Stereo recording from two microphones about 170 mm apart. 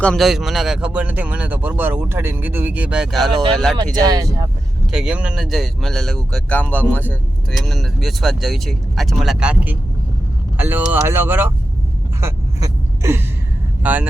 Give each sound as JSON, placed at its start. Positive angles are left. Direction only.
{"t": 0.0, "sound": "speech", "side_deg": 0}
{"t": 3.9, "sound": "speech", "side_deg": -20}
{"t": 4.9, "sound": "speech", "side_deg": -5}
{"t": 12.2, "sound": "a sound", "side_deg": -20}
{"t": 13.8, "sound": "speech", "side_deg": -10}